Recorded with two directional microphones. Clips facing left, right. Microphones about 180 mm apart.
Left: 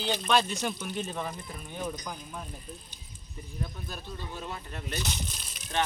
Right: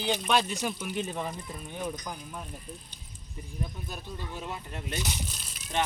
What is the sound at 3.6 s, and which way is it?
Speech, 15° right (ahead or behind).